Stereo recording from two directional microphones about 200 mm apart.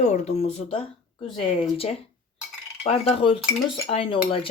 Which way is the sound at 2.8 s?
30° left (ahead or behind).